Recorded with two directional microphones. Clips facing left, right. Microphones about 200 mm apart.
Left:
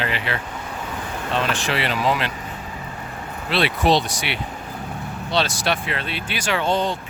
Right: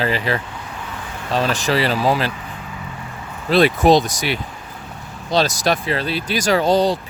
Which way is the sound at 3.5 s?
40° right (ahead or behind).